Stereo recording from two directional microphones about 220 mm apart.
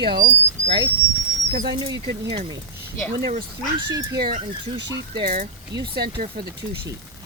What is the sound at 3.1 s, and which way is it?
Speech, 40° right (ahead or behind).